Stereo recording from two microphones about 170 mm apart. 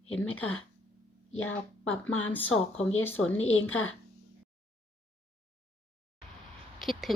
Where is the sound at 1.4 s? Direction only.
10° left (ahead or behind).